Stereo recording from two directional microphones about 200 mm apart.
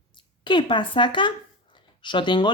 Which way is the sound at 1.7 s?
25° left (ahead or behind).